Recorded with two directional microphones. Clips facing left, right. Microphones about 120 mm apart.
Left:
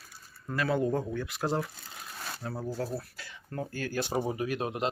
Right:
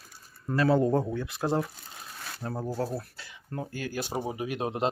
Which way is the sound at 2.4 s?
40° right (ahead or behind).